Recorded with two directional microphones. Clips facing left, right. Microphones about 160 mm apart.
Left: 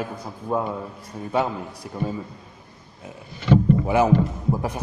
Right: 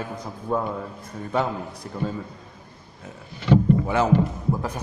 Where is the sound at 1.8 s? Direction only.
10° left (ahead or behind).